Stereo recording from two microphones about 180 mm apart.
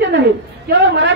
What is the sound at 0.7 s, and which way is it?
Speech, 90° right.